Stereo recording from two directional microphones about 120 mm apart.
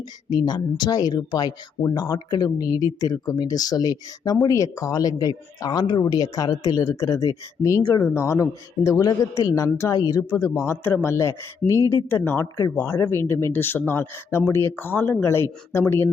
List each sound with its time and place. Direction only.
0.3 s speech: 35° left (ahead or behind)